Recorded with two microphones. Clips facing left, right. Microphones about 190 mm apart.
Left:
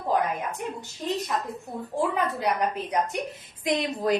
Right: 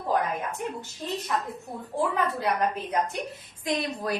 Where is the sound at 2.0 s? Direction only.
20° left (ahead or behind).